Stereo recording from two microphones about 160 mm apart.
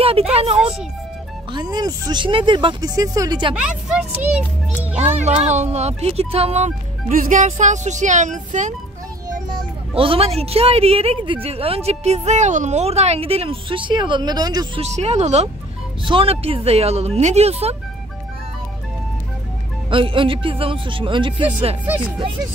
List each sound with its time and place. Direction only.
0.0 s a woman's voice: 40° right (ahead or behind)
1.5 s speech: 25° right (ahead or behind)
3.5 s speech: 5° right (ahead or behind)
5.2 s speech: 45° right (ahead or behind)
9.6 s a woman's voice: 35° right (ahead or behind)
14.8 s a woman's voice: 45° right (ahead or behind)
19.9 s a woman's voice: 35° right (ahead or behind)
21.8 s speech: 10° right (ahead or behind)